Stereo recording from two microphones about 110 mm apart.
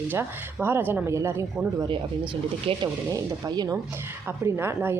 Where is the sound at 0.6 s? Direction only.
20° right (ahead or behind).